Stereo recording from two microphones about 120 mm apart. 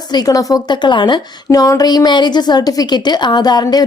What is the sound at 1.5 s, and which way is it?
A woman's voice, 30° left (ahead or behind).